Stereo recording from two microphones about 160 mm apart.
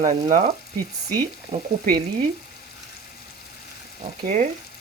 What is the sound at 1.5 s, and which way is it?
Frying, 40° right (ahead or behind).